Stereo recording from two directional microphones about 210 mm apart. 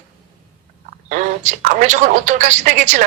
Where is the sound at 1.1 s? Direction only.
35° right (ahead or behind).